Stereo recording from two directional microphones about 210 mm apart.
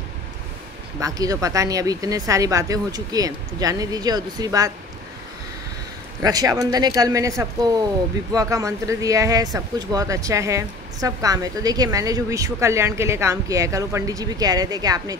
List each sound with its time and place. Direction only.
0.9 s speech: 15° right (ahead or behind)
6.2 s speech: 15° right (ahead or behind)